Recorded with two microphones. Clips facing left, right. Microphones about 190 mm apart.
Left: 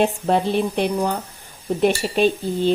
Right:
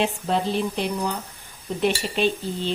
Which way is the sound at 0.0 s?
55° left (ahead or behind).